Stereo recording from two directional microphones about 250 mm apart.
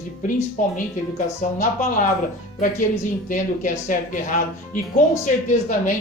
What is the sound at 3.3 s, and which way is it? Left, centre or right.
A woman's voice, left.